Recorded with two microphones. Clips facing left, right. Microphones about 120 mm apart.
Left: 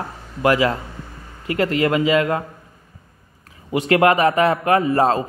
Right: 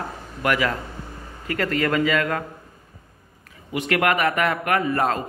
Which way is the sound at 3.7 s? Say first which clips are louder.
Left 6 dB; 30° left (ahead or behind).